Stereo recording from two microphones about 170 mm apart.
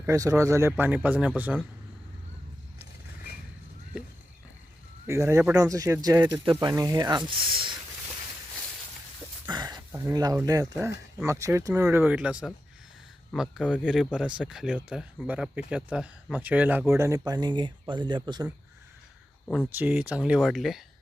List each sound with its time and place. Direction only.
0.0 s speech: 20° right (ahead or behind)
5.0 s speech: 15° right (ahead or behind)
9.5 s a sound: 25° right (ahead or behind)
10.4 s speech: 20° right (ahead or behind)
19.7 s speech: 10° right (ahead or behind)